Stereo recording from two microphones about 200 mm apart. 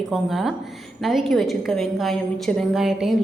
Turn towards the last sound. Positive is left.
turn(degrees=0)  # may be behind; listen again after turning